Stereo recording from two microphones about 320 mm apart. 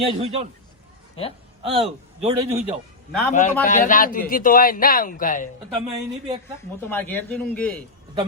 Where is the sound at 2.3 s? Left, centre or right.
Centre.